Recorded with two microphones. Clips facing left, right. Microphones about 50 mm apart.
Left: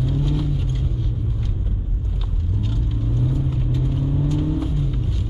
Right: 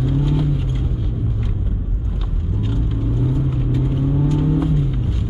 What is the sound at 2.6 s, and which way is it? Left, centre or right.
Car, centre.